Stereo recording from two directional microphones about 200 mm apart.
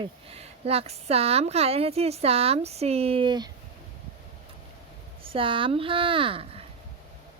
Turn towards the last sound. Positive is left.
turn(degrees=-25)  # may be behind; listen again after turning